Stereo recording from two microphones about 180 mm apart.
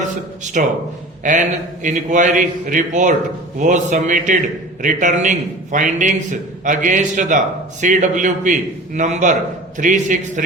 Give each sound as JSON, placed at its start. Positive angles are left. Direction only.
{"t": 0.6, "sound": "a man's voice", "side_deg": -50}